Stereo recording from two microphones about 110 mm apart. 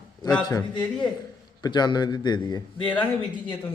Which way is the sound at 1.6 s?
40° left (ahead or behind).